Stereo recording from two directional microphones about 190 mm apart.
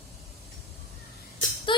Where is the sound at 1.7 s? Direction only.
25° left (ahead or behind).